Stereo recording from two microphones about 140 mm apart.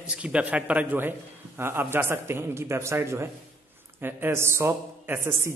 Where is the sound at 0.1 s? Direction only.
10° right (ahead or behind).